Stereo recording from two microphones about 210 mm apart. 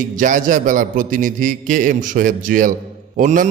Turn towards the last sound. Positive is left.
turn(degrees=-40)  # may be behind; listen again after turning